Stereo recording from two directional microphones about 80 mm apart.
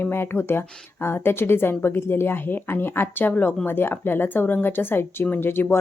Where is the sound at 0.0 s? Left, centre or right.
Left.